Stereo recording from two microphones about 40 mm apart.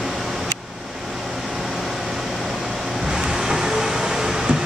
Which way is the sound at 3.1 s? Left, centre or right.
Centre.